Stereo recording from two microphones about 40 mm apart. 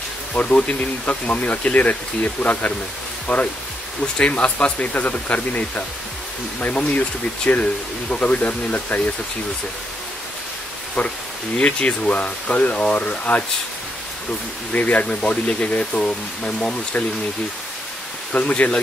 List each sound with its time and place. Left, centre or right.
0.3 s speech: left
6.9 s speech: left
11.0 s speech: left
11.5 s speech: left
14.7 s speech: left
18.3 s speech: left